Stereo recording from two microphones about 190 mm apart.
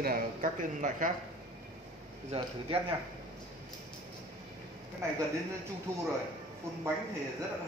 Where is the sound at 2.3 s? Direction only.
30° right (ahead or behind).